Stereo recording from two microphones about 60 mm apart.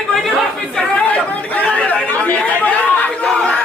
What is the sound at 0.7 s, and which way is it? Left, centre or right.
Chatter, centre.